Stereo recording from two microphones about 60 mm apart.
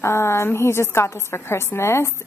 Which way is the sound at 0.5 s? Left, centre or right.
Left.